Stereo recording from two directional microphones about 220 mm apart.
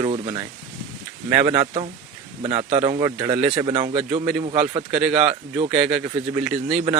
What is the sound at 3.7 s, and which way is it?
Speech, 30° right (ahead or behind).